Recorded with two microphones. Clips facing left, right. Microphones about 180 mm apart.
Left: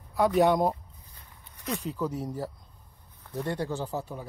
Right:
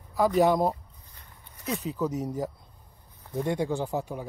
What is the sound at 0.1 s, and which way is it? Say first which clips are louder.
Speech: even; centre (ahead or behind).